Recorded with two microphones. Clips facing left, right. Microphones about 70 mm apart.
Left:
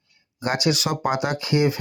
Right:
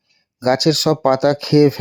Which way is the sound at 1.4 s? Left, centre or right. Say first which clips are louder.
Right 7 dB; right.